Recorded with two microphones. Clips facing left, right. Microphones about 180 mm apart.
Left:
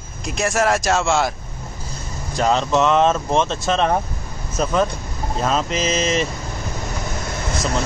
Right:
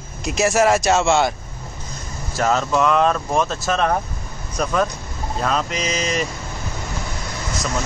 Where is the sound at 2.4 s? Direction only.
20° left (ahead or behind).